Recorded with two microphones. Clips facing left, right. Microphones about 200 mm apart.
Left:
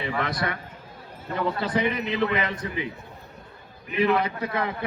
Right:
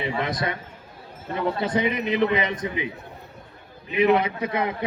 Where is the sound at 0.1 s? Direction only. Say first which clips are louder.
Right 1 dB; 20° right (ahead or behind).